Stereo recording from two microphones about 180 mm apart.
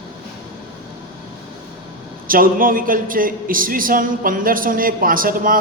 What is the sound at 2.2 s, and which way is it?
A man's voice, 50° right (ahead or behind).